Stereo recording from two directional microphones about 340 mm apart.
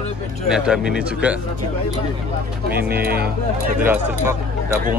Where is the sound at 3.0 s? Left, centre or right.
Right.